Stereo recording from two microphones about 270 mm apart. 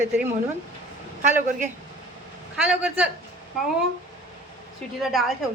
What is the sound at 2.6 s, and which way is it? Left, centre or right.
Speech, centre.